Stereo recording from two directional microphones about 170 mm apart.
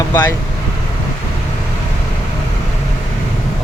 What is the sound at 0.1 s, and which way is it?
Speech, 15° left (ahead or behind).